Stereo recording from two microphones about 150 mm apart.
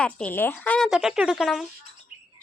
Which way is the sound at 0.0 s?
10° left (ahead or behind).